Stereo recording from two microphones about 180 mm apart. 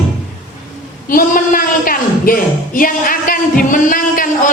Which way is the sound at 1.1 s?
50° left (ahead or behind).